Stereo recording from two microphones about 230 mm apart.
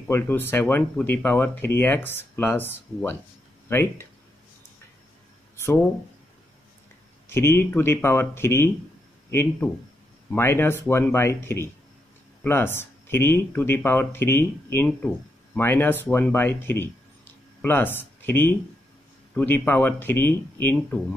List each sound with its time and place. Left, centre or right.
0.1 s speech: centre
7.2 s speech: centre